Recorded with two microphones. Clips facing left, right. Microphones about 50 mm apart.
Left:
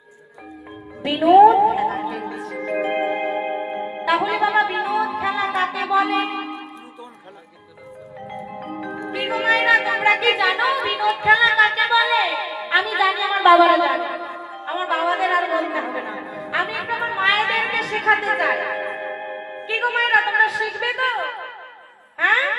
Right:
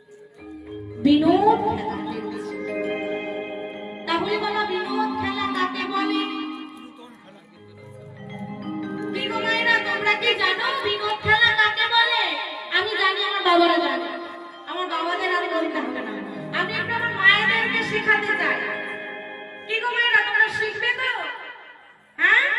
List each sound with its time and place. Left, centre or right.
1.0 s music: left
4.2 s music: left
8.5 s music: centre
10.8 s speech: centre
12.3 s a sound: centre
12.5 s a sound: left
12.9 s speech: centre
13.7 s a sound: centre
15.7 s music: left
17.0 s music: centre
19.7 s a sound: centre
22.2 s music: centre